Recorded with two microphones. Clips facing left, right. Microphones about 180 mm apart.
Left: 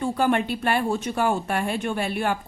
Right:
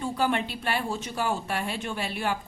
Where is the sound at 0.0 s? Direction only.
55° left (ahead or behind).